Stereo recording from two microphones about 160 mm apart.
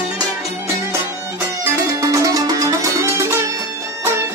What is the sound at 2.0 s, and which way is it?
Music, 20° right (ahead or behind).